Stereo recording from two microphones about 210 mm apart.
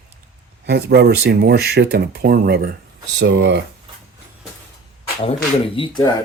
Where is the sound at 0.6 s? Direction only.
50° right (ahead or behind).